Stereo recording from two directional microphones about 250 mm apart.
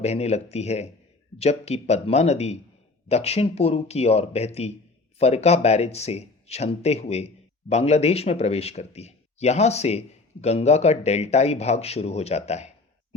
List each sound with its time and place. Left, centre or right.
0.0 s speech: left